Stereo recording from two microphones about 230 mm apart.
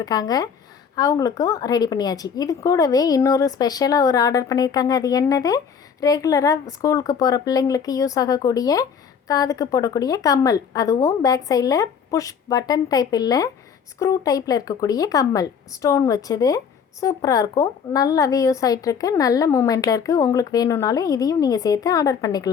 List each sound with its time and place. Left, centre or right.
0.0 s a woman's voice: centre